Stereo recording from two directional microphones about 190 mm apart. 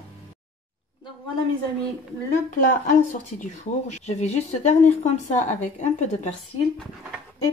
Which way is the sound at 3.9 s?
35° left (ahead or behind).